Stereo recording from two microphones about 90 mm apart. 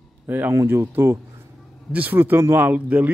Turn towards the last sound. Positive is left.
turn(degrees=-15)  # may be behind; listen again after turning